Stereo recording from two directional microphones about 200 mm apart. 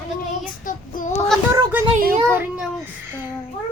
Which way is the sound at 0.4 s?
40° left (ahead or behind).